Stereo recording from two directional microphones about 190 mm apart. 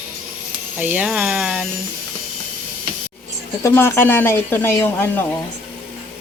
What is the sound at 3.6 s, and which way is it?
Speech, 10° left (ahead or behind).